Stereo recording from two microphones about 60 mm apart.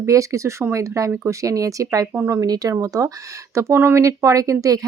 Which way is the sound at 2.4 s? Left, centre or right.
Right.